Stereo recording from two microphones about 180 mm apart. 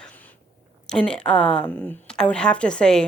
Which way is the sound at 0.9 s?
5° left (ahead or behind).